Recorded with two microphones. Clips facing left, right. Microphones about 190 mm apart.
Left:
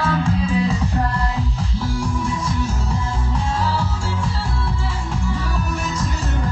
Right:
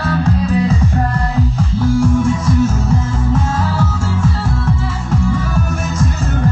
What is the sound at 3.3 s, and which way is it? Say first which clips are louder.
Music: right 2 dB; 45° right (ahead or behind).